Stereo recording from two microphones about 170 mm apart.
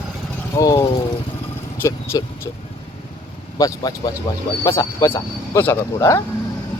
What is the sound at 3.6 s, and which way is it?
Speech, 20° left (ahead or behind).